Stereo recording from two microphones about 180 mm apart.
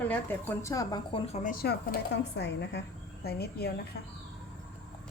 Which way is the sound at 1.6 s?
65° left (ahead or behind).